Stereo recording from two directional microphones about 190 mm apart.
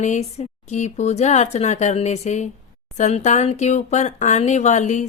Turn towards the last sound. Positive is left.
turn(degrees=40)  # may be behind; listen again after turning